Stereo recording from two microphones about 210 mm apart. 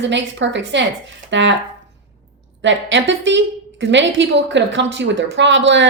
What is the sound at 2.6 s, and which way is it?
A woman's voice, 60° right (ahead or behind).